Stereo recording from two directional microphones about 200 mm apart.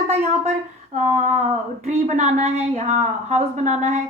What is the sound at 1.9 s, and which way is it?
A woman's voice, 35° right (ahead or behind).